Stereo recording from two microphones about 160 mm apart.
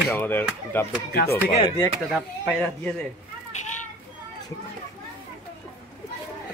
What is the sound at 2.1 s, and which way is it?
Speech, centre (ahead or behind).